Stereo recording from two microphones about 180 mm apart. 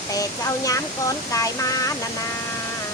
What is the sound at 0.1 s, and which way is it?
Speech, 20° left (ahead or behind).